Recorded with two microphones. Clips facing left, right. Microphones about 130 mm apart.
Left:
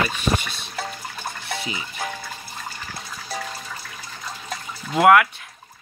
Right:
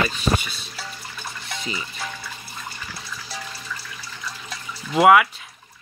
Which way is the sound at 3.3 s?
50° left (ahead or behind).